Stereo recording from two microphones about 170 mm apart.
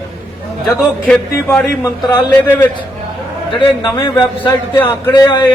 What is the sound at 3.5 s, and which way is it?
A man's voice, 25° left (ahead or behind).